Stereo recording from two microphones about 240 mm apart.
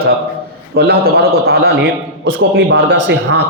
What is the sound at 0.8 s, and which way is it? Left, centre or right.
A man's voice, right.